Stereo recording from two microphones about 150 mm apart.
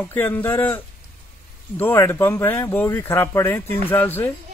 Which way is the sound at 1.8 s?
15° left (ahead or behind).